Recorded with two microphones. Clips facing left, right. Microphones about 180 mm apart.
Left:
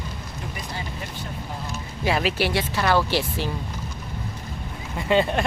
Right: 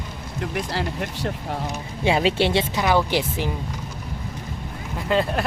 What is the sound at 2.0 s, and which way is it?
Speech, 25° right (ahead or behind).